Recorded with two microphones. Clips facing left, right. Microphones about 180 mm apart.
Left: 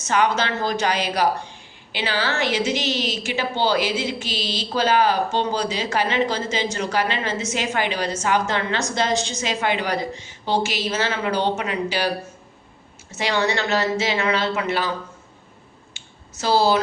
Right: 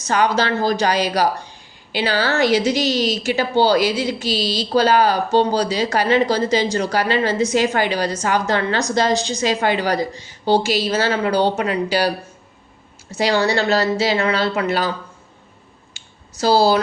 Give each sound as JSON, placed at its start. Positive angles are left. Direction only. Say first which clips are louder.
{"t": 0.0, "sound": "a woman's voice", "louder": "right 3 dB", "side_deg": -35}
{"t": 16.4, "sound": "a woman's voice", "louder": "right 4 dB", "side_deg": -35}